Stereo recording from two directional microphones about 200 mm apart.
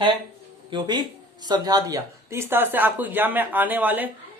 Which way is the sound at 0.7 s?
20° right (ahead or behind).